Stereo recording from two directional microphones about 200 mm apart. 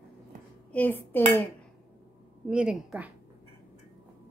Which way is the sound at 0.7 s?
10° left (ahead or behind).